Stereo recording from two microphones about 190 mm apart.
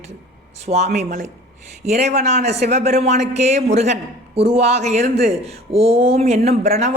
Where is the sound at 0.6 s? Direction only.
35° right (ahead or behind).